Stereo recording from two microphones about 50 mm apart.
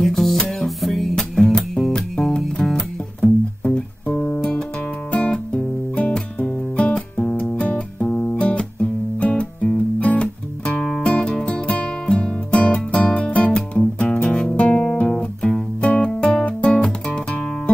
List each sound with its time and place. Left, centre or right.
0.0 s music: centre
5.1 s music: left